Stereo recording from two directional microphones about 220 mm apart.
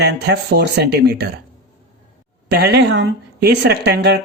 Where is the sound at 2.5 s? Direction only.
50° right (ahead or behind).